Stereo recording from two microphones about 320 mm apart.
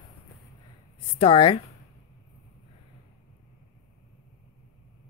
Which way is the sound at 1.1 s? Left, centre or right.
Centre.